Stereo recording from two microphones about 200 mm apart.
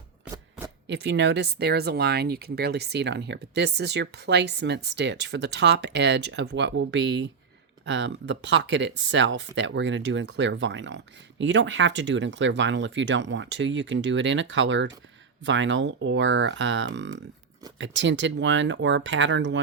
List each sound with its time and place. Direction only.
0.9 s speech: 60° right (ahead or behind)